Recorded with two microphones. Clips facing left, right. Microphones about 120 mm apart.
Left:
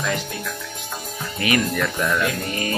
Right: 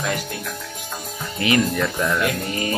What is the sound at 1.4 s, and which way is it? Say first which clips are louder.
Speech: right 1 dB; 25° right (ahead or behind).